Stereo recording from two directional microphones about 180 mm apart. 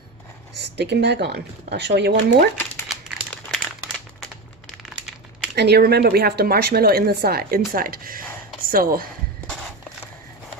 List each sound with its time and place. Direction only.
0.5 s speech: 70° right (ahead or behind)
2.9 s crumpling: 5° left (ahead or behind)
5.5 s a woman's voice: 65° right (ahead or behind)